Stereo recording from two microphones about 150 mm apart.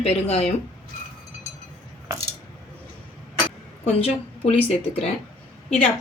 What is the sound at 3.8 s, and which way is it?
Speech, 40° left (ahead or behind).